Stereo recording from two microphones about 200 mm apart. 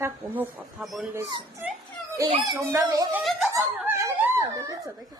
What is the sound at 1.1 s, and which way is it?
A woman's voice, 15° right (ahead or behind).